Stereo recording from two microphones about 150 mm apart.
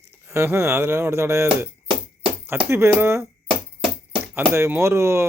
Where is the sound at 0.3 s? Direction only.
20° right (ahead or behind).